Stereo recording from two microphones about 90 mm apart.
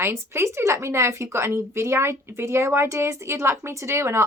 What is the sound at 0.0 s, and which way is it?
Speech, 30° right (ahead or behind).